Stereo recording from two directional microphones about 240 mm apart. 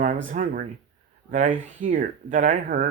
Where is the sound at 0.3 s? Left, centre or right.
Right.